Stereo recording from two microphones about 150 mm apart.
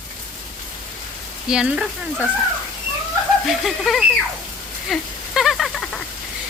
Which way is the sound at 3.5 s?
Centre (ahead or behind).